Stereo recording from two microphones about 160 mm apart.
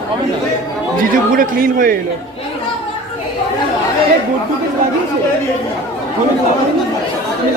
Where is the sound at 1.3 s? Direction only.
60° right (ahead or behind).